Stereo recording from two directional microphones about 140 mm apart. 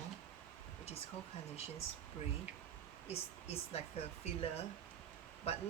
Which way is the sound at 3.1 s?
45° left (ahead or behind).